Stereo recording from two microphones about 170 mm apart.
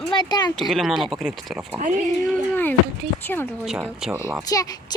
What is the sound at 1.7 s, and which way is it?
Speech, 45° right (ahead or behind).